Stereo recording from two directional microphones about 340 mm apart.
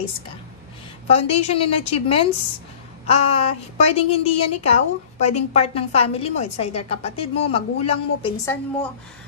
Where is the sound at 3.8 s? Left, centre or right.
Centre.